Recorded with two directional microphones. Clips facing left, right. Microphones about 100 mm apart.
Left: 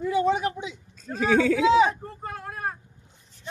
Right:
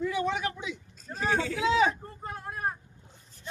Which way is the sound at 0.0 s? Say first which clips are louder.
Left 6 dB; 45° left (ahead or behind).